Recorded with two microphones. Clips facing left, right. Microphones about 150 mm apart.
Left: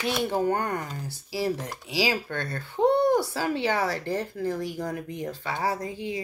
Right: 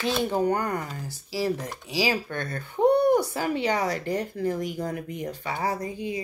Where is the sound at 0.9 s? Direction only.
10° right (ahead or behind).